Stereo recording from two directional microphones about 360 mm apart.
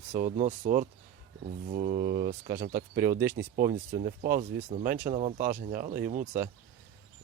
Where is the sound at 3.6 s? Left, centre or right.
Right.